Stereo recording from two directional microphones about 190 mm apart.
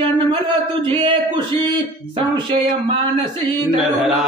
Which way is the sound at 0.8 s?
25° right (ahead or behind).